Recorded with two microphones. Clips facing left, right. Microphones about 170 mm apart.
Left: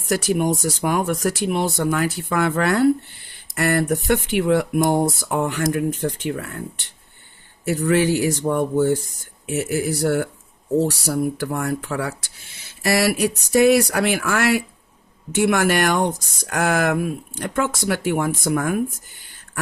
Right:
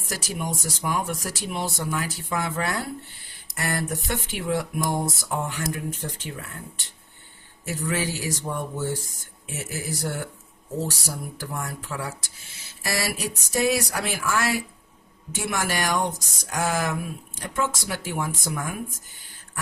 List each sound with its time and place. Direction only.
0.1 s speech: 65° left (ahead or behind)
7.6 s speech: 65° left (ahead or behind)